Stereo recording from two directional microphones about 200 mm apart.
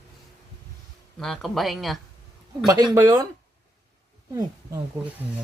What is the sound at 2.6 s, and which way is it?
Speech, 20° right (ahead or behind).